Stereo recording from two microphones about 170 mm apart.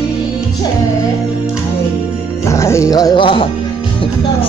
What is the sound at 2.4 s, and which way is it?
Music, 15° left (ahead or behind).